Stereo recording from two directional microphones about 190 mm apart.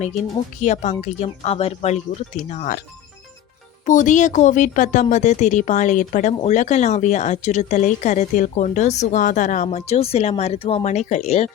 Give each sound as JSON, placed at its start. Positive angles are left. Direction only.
{"t": 0.6, "sound": "speech", "side_deg": 40}
{"t": 3.8, "sound": "speech", "side_deg": 40}